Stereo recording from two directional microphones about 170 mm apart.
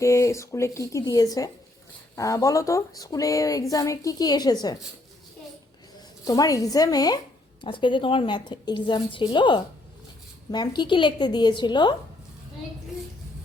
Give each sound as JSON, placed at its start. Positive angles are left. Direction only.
{"t": 0.0, "sound": "speech", "side_deg": 15}
{"t": 6.2, "sound": "speech", "side_deg": 20}